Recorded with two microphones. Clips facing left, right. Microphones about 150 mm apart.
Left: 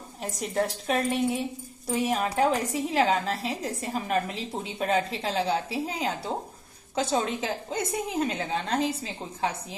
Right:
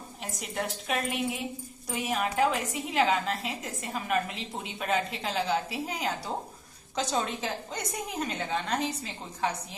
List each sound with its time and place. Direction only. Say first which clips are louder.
0.2 s a woman's voice: left 6 dB; 35° left (ahead or behind)